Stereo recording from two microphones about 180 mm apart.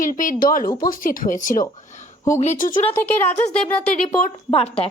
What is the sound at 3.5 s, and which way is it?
Speech, 10° left (ahead or behind).